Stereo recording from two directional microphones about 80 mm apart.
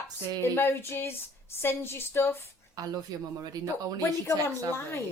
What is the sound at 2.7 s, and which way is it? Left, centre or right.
Speech, right.